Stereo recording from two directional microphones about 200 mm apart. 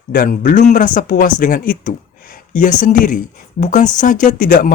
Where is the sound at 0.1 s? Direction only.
45° left (ahead or behind).